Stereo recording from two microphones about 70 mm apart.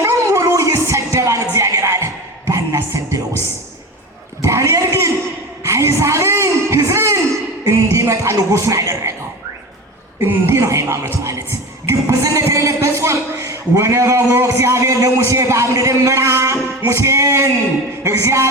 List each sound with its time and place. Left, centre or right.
0.0 s music: right
4.4 s a sound: right
7.6 s music: right
10.2 s a man's voice: right
11.9 s a sound: right
14.4 s a man's voice: right